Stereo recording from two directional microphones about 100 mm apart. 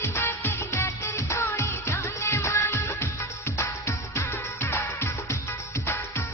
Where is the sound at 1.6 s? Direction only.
25° left (ahead or behind).